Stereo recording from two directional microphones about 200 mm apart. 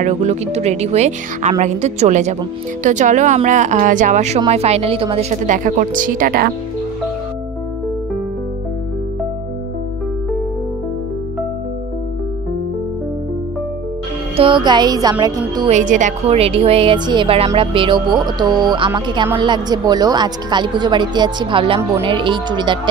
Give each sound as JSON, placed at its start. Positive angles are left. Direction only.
{"t": 0.0, "sound": "speech", "side_deg": -35}
{"t": 14.3, "sound": "speech", "side_deg": -25}
{"t": 15.7, "sound": "speech", "side_deg": -40}